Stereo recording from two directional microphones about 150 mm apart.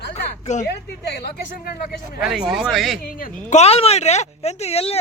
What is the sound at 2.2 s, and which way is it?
Speech, centre (ahead or behind).